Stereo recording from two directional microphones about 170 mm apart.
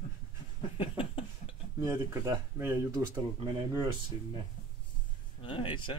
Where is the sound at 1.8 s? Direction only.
15° right (ahead or behind).